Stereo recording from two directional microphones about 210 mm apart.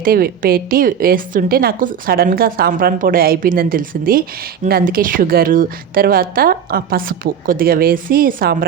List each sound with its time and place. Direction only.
0.0 s a woman's voice: 45° right (ahead or behind)